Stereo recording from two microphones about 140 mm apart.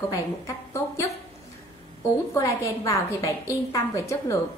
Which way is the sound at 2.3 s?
20° left (ahead or behind).